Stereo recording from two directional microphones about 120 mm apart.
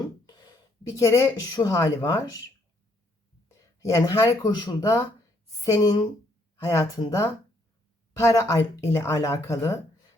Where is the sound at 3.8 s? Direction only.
25° left (ahead or behind).